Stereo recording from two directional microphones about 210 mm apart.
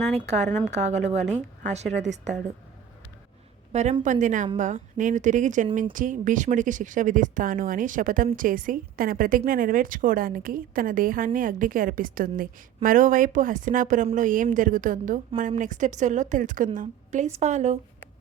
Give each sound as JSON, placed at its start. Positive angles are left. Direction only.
{"t": 0.2, "sound": "a woman's voice", "side_deg": -30}
{"t": 3.7, "sound": "a woman's voice", "side_deg": -30}